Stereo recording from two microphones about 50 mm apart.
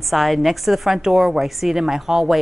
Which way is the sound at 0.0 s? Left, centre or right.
Centre.